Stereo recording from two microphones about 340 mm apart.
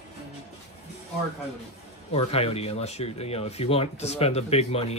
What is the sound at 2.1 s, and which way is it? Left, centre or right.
Speech, centre.